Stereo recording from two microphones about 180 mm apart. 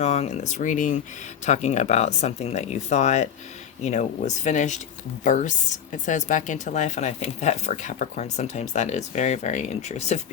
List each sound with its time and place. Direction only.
0.0 s a woman's voice: 40° left (ahead or behind)